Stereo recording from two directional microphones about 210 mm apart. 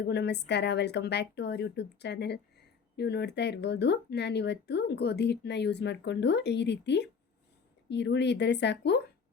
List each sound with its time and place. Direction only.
0.0 s speech: 55° left (ahead or behind)